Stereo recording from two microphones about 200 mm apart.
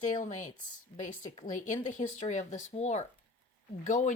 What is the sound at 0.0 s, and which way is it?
Speech, 40° left (ahead or behind).